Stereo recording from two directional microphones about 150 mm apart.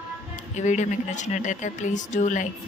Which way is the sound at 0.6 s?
55° left (ahead or behind).